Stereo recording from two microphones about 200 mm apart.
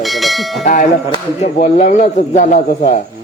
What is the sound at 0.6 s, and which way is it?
A man's voice, 40° left (ahead or behind).